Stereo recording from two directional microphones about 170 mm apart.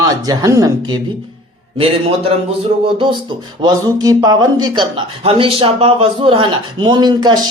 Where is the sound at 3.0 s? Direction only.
30° right (ahead or behind).